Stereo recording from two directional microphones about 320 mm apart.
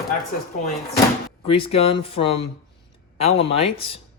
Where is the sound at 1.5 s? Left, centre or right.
Centre.